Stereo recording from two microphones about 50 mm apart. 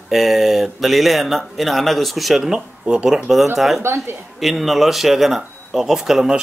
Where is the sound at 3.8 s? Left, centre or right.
Right.